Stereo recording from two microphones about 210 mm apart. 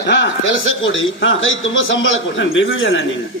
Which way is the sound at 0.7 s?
65° left (ahead or behind).